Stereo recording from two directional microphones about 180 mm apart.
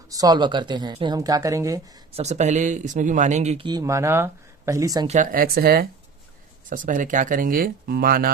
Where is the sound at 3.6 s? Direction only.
20° right (ahead or behind).